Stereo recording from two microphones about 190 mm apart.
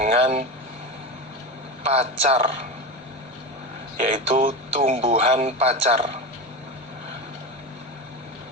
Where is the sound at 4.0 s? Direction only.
35° right (ahead or behind).